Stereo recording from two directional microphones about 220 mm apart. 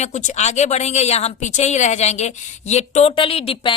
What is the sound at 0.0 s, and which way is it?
Speech, 30° left (ahead or behind).